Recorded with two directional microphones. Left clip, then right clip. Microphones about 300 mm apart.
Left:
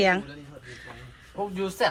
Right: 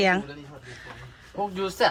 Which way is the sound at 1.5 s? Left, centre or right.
Right.